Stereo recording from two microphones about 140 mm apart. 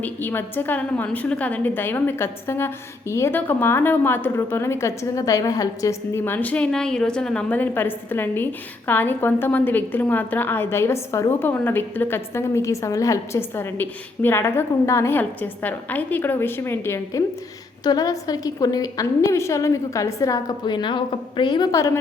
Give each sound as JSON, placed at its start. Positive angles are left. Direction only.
{"t": 0.0, "sound": "a woman's voice", "side_deg": 15}